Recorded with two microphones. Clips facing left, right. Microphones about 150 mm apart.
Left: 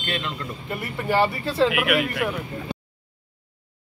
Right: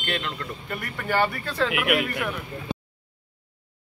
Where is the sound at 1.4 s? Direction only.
25° left (ahead or behind).